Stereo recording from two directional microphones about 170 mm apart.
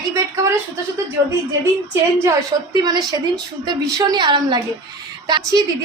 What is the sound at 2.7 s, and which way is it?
Speech, 25° right (ahead or behind).